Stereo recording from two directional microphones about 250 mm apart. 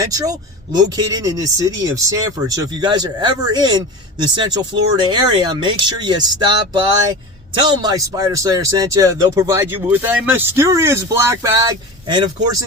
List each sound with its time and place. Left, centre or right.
0.0 s speech: centre